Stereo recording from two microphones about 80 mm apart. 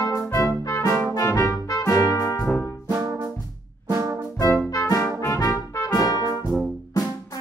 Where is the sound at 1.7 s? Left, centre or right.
Left.